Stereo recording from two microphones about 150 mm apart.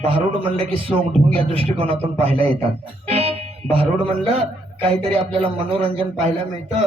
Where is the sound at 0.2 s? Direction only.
40° right (ahead or behind).